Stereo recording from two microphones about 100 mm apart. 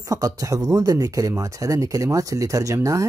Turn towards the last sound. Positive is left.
turn(degrees=-35)  # may be behind; listen again after turning